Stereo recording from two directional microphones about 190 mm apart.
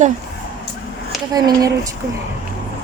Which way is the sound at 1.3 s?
20° right (ahead or behind).